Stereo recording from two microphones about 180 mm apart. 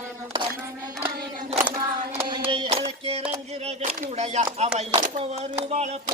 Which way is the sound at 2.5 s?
30° right (ahead or behind).